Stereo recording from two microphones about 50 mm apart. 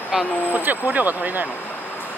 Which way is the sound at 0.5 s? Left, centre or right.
Right.